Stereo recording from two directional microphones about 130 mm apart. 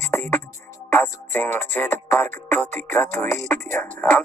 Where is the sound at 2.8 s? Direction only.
20° left (ahead or behind).